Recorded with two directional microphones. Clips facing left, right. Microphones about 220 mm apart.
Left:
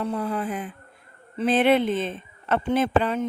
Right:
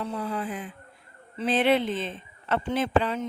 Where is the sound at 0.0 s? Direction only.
55° left (ahead or behind).